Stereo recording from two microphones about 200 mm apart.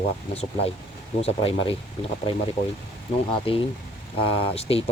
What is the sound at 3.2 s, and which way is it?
Speech, 25° left (ahead or behind).